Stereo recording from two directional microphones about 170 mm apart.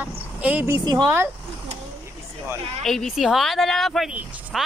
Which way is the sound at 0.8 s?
20° right (ahead or behind).